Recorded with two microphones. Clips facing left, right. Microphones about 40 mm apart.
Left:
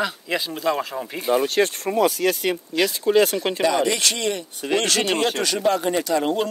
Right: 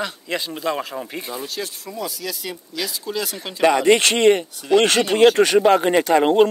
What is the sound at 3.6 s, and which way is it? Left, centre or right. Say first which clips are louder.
Speech: right 7 dB; right.